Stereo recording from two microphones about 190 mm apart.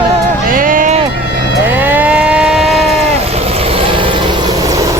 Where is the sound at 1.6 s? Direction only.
10° right (ahead or behind).